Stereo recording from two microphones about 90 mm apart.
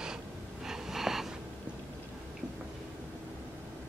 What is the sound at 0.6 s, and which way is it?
Wheeze, 5° right (ahead or behind).